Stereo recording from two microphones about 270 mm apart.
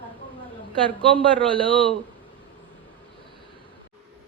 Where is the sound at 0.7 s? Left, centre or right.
Centre.